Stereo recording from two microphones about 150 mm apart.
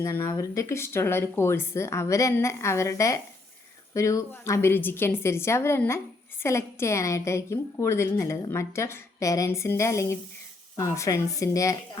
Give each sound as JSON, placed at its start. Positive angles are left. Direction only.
{"t": 0.0, "sound": "a woman's voice", "side_deg": 15}